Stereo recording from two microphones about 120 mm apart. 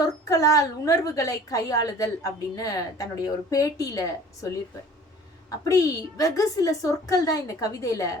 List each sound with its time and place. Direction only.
0.0 s a woman's voice: 30° left (ahead or behind)